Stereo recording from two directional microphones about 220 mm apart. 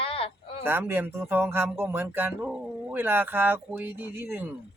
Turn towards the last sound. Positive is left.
turn(degrees=-10)  # may be behind; listen again after turning